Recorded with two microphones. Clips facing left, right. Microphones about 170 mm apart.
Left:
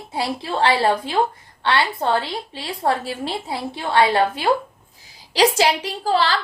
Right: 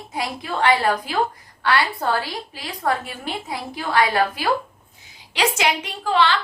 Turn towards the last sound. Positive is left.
turn(degrees=35)  # may be behind; listen again after turning